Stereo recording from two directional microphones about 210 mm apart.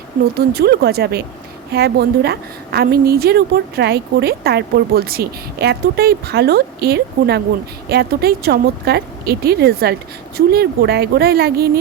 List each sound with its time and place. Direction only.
0.3 s a woman's voice: 50° right (ahead or behind)